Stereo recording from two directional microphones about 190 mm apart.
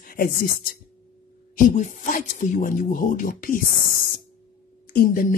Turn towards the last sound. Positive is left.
turn(degrees=45)  # may be behind; listen again after turning